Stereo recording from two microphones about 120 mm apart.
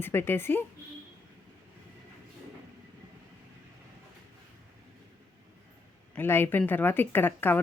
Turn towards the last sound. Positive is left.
turn(degrees=15)  # may be behind; listen again after turning